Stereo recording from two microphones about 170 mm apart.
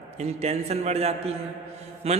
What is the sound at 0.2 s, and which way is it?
A man's voice, 40° right (ahead or behind).